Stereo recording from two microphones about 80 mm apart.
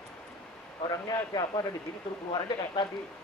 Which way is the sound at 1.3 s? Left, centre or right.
Left.